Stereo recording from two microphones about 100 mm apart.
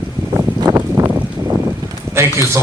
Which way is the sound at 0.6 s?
20° right (ahead or behind).